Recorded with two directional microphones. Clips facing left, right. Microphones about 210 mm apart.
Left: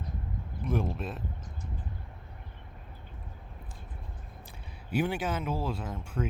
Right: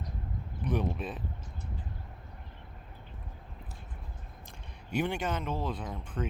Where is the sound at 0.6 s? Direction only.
Centre (ahead or behind).